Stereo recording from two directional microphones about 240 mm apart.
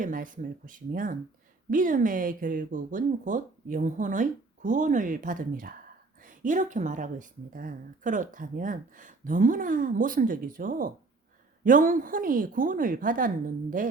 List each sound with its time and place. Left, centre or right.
0.0 s speech: right